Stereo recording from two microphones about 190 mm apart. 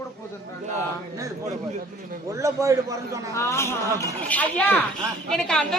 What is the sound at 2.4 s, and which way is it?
Speech, 15° right (ahead or behind).